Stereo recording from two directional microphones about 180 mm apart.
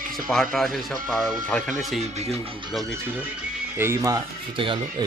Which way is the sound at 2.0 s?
40° right (ahead or behind).